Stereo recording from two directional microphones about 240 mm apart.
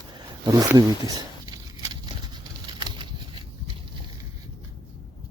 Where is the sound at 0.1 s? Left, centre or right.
Centre.